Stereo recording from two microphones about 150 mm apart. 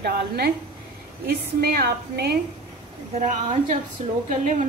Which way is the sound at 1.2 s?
90° right.